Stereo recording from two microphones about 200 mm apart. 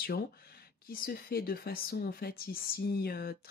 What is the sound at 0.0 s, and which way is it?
Speech, 50° left (ahead or behind).